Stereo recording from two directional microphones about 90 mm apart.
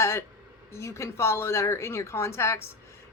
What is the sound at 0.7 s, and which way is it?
A woman's voice, 30° left (ahead or behind).